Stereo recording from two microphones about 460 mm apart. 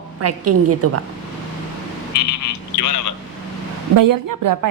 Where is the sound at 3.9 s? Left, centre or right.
Right.